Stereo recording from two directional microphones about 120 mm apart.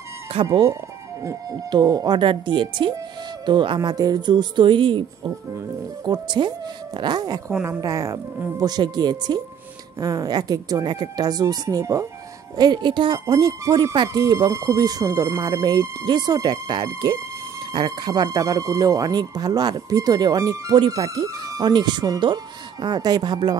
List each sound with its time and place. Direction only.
0.3 s speech: 55° right (ahead or behind)
1.2 s speech: 25° right (ahead or behind); by 13.2 s 40° right (ahead or behind)
13.3 s speech: 30° right (ahead or behind)